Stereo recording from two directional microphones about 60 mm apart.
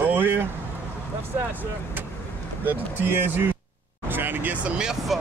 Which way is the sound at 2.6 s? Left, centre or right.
Right.